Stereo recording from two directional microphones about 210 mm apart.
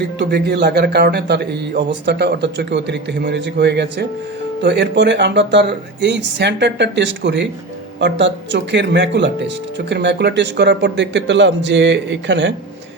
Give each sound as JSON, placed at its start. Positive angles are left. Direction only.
{"t": 0.2, "sound": "a man's voice", "side_deg": -50}